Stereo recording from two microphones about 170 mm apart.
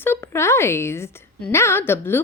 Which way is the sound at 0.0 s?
15° left (ahead or behind).